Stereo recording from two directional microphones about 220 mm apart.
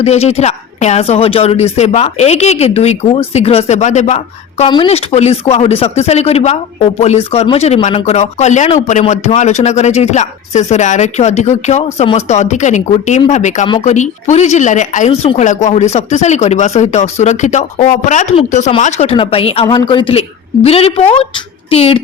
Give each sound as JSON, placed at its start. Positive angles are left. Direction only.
{"t": 0.0, "sound": "a woman's voice", "side_deg": 30}